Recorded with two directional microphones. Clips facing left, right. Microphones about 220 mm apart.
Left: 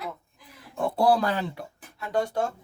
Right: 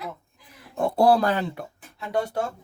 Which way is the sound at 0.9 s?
45° right (ahead or behind).